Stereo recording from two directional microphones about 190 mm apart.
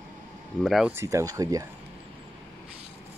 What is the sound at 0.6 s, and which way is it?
Speech, centre (ahead or behind).